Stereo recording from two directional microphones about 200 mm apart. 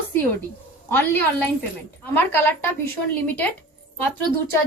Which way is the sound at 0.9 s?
10° left (ahead or behind).